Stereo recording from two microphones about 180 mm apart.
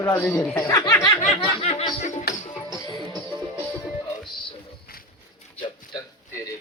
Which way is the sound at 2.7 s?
25° left (ahead or behind).